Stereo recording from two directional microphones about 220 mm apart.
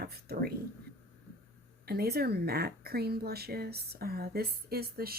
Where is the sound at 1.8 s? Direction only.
45° right (ahead or behind).